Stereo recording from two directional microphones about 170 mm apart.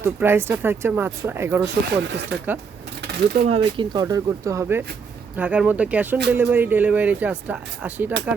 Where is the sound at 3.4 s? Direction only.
30° right (ahead or behind).